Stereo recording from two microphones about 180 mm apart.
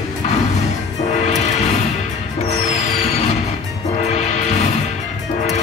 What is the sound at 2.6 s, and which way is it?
Music, 40° left (ahead or behind).